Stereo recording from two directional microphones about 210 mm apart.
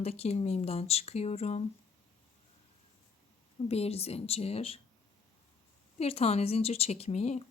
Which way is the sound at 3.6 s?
30° left (ahead or behind).